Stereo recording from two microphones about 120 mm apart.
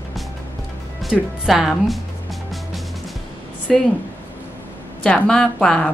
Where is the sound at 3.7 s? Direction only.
Centre (ahead or behind).